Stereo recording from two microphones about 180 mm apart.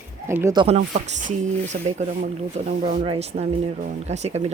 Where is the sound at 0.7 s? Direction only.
40° right (ahead or behind).